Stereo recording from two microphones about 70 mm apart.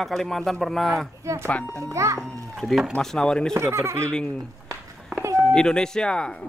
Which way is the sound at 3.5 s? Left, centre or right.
Right.